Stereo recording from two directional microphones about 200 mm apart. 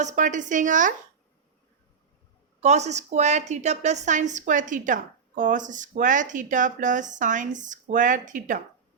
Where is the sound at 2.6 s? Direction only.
35° right (ahead or behind).